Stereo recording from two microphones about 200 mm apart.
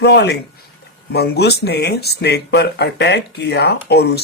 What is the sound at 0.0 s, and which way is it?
Speech, 60° left (ahead or behind).